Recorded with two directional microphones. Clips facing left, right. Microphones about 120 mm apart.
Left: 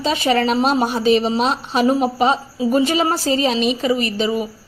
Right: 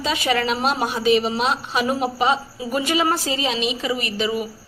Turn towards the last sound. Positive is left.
turn(degrees=30)  # may be behind; listen again after turning